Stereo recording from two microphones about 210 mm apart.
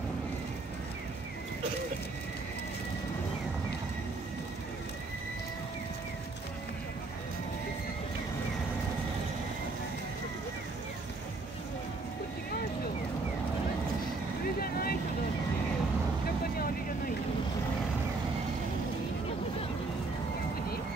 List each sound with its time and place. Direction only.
14.6 s vehicle: 45° left (ahead or behind)